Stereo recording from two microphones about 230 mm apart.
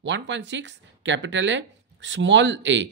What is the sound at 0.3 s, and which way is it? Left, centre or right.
Speech, right.